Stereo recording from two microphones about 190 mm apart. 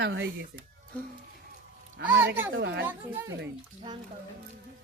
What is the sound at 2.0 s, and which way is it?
Speech, 10° right (ahead or behind).